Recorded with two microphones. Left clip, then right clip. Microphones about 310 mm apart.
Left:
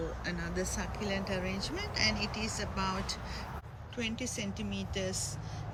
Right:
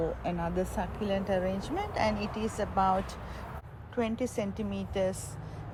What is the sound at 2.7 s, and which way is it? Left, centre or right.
Speech, centre.